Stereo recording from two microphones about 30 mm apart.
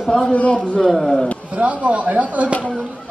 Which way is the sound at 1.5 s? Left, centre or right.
Right.